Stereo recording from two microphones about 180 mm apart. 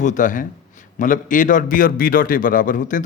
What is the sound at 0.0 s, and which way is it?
A man's voice, 45° left (ahead or behind).